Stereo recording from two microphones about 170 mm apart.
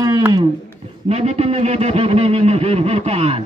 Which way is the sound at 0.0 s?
20° right (ahead or behind).